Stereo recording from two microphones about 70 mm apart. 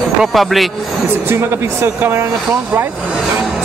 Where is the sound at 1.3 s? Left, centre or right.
Right.